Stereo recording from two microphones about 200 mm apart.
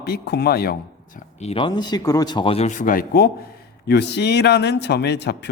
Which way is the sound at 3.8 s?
55° left (ahead or behind).